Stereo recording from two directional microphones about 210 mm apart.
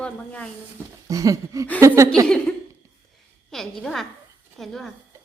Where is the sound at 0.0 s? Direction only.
5° left (ahead or behind).